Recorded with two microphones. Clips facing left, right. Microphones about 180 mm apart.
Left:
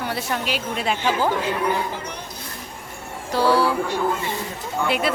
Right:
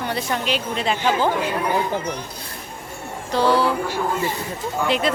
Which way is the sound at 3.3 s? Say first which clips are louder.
Even; 10° left (ahead or behind).